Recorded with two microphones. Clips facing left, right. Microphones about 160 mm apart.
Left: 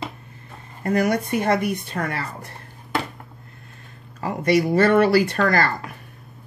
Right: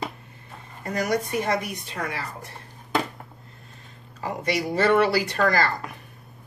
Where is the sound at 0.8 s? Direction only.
55° left (ahead or behind).